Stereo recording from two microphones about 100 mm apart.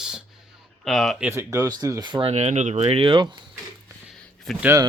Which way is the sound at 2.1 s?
65° right (ahead or behind).